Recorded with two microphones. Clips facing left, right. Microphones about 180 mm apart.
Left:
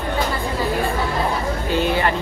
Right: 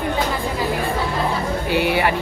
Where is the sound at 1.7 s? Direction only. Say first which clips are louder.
Right 1 dB; 15° right (ahead or behind).